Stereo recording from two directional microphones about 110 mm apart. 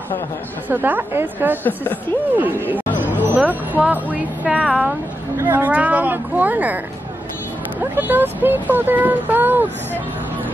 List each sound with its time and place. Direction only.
0.7 s speech: 15° right (ahead or behind)
1.6 s speech: 15° left (ahead or behind)
3.0 s speech: 15° right (ahead or behind)
4.6 s speech: centre (ahead or behind)
5.4 s speech: 15° right (ahead or behind)
7.8 s speech: 15° right (ahead or behind)